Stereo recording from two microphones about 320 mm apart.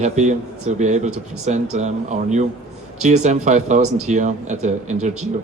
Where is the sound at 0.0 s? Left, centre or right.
Right.